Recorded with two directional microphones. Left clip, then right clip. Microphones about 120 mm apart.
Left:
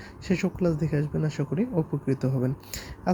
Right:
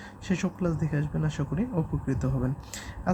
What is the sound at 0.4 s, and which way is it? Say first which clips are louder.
Speech: left 5 dB; 20° left (ahead or behind).